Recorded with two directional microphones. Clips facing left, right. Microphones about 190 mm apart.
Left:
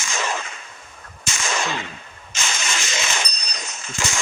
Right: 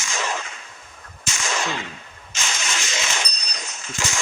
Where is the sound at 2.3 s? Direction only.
55° left (ahead or behind).